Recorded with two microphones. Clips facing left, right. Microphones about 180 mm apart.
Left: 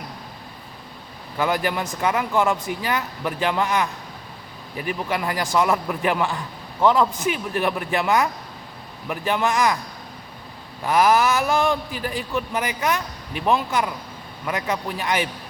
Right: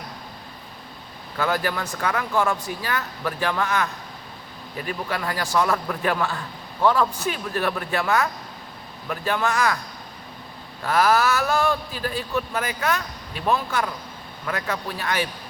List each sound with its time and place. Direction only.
1.4 s a man's voice: 15° left (ahead or behind)
10.8 s a man's voice: 15° left (ahead or behind)